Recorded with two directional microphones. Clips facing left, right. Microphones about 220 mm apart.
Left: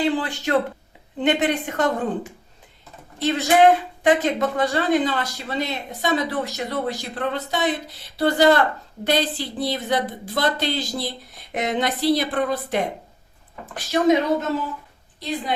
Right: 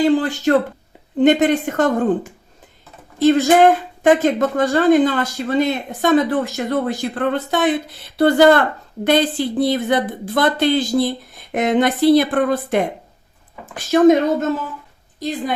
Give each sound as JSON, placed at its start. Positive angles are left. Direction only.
{"t": 0.0, "sound": "speech", "side_deg": -45}
{"t": 15.2, "sound": "speech", "side_deg": -45}